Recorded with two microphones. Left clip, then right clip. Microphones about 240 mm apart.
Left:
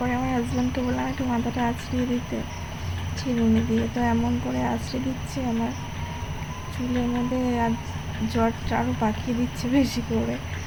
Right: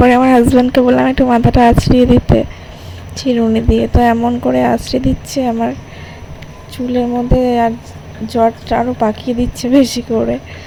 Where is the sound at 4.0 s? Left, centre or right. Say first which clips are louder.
Right 15 dB; right.